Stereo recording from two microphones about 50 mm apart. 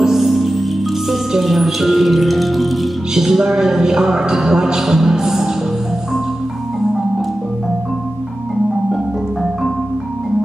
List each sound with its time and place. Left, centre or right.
0.0 s music: centre
1.3 s speech: centre
3.2 s a sound: centre